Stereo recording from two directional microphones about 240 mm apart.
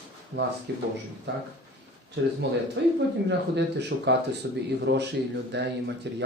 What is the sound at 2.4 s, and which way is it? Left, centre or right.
Speech, right.